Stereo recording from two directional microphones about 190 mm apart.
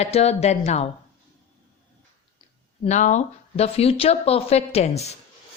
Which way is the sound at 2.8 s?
40° left (ahead or behind).